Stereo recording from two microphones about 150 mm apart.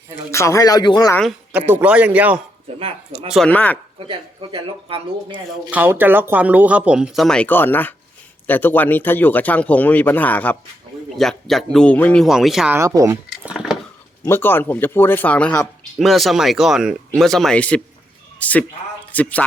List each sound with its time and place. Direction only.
0.3 s speech: 20° left (ahead or behind)
1.5 s speech: 10° right (ahead or behind)
2.7 s speech: 40° right (ahead or behind)
3.4 s speech: 10° left (ahead or behind)
3.9 s speech: 35° right (ahead or behind)
5.7 s speech: 10° right (ahead or behind)
12.7 s speech: 20° right (ahead or behind)
13.3 s a sound: 5° right (ahead or behind)
14.3 s a man's voice: 15° left (ahead or behind)